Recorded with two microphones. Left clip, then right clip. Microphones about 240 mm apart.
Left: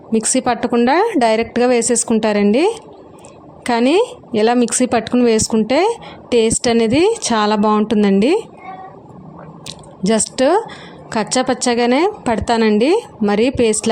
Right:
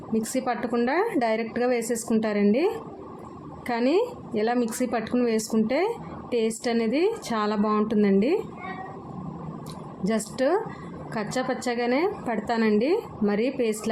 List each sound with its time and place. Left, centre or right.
0.1 s a woman's voice: left
10.0 s a woman's voice: left